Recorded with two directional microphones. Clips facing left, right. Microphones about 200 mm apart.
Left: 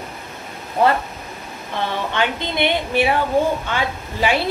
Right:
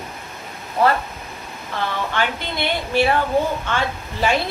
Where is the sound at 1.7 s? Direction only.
20° left (ahead or behind).